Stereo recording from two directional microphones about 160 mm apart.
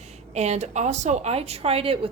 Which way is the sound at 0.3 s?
45° right (ahead or behind).